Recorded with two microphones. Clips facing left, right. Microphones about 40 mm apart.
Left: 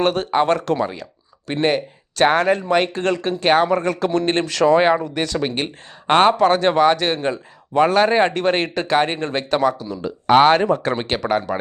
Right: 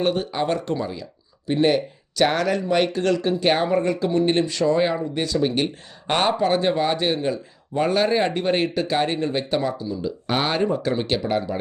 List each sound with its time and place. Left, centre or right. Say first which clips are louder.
0.0 s speech: left 5 dB; left
1.5 s speech: even; left
4.4 s speech: left 6 dB; left
4.8 s speech: left 5 dB; left
5.4 s speech: right 1 dB; left
6.3 s speech: left 5 dB; left